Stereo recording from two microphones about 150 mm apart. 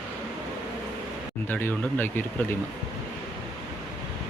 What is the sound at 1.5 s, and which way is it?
Speech, 15° left (ahead or behind).